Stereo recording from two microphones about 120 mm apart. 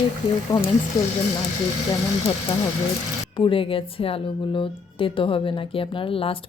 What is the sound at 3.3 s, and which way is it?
A woman's voice, 45° left (ahead or behind).